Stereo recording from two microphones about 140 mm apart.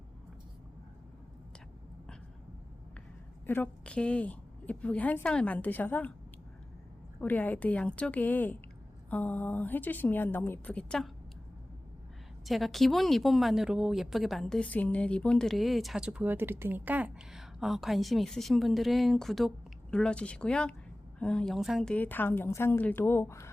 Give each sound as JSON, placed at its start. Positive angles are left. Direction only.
{"t": 3.4, "sound": "a woman's voice", "side_deg": 10}
{"t": 7.2, "sound": "a woman's voice", "side_deg": 10}
{"t": 12.5, "sound": "speech", "side_deg": 0}
{"t": 21.9, "sound": "a woman's voice", "side_deg": 10}